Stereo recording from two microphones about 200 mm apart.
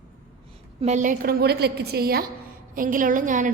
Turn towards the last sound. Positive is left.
turn(degrees=-40)  # may be behind; listen again after turning